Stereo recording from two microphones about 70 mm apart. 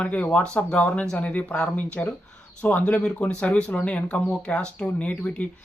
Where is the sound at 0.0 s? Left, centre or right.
Centre.